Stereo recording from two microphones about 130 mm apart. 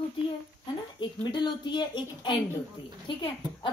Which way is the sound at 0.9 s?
35° left (ahead or behind).